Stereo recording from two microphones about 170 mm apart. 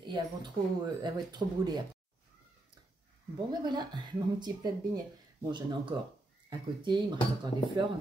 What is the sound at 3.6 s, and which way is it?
Speech, 25° right (ahead or behind).